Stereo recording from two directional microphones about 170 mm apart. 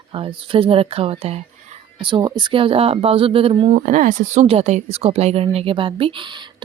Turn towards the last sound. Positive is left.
turn(degrees=-30)  # may be behind; listen again after turning